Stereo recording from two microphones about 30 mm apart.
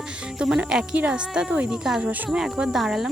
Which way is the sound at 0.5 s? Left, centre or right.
Right.